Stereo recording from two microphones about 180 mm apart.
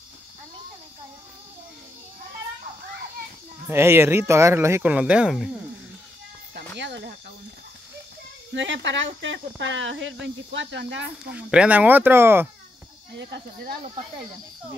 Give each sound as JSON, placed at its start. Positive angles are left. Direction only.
{"t": 3.6, "sound": "speech", "side_deg": -15}
{"t": 6.5, "sound": "music", "side_deg": -75}
{"t": 8.5, "sound": "speech", "side_deg": -90}
{"t": 11.3, "sound": "speech", "side_deg": -5}
{"t": 13.2, "sound": "speech", "side_deg": -70}